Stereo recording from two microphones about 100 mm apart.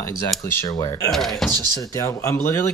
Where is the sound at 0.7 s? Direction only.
40° left (ahead or behind).